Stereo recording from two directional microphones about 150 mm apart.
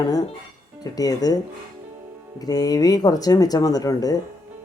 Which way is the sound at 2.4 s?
25° left (ahead or behind).